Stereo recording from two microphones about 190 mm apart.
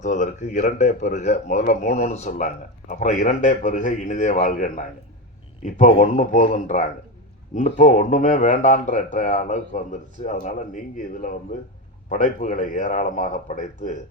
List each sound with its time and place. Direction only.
0.0 s speech: 40° left (ahead or behind)